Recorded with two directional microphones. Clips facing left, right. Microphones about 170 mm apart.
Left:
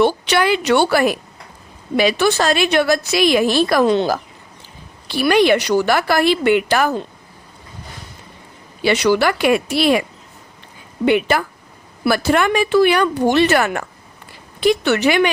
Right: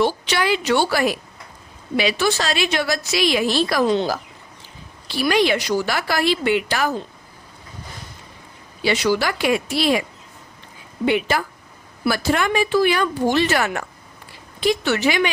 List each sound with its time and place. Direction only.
0.0 s a woman's voice: 60° left (ahead or behind)
8.8 s a woman's voice: 65° left (ahead or behind)
11.0 s a woman's voice: 60° left (ahead or behind)